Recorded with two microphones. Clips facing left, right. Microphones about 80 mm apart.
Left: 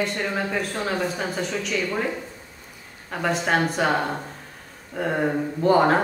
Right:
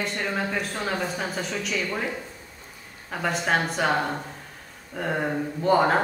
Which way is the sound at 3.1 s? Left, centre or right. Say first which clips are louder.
Left 2 dB; centre.